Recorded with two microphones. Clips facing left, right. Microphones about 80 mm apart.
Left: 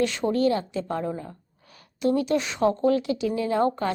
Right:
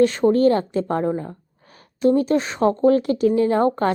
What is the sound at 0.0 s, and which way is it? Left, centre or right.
A woman's voice, right.